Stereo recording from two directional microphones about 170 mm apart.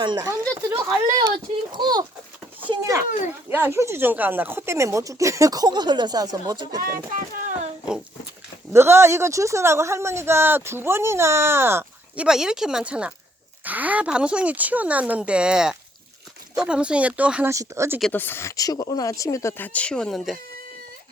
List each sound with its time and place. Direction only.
0.0 s speech: 25° right (ahead or behind)
1.7 s a sound: 25° right (ahead or behind)
3.5 s speech: 15° right (ahead or behind)
8.7 s speech: 15° right (ahead or behind)
18.0 s speech: 10° left (ahead or behind)